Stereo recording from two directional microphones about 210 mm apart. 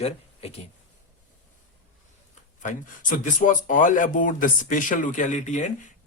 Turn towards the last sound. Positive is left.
turn(degrees=35)  # may be behind; listen again after turning